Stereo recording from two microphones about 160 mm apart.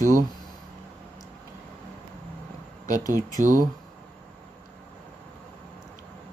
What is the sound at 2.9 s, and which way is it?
Speech, 20° left (ahead or behind).